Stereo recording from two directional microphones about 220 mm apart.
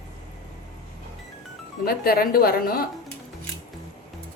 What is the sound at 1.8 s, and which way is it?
A woman's voice, 40° left (ahead or behind).